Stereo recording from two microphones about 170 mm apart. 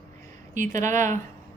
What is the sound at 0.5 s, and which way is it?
Speech, 50° right (ahead or behind).